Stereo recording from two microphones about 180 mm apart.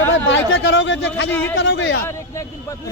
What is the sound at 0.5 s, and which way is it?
Speech, 90° left.